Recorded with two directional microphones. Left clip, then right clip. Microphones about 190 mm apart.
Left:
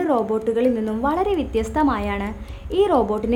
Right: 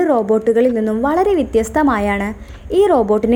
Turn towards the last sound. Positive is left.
turn(degrees=-30)  # may be behind; listen again after turning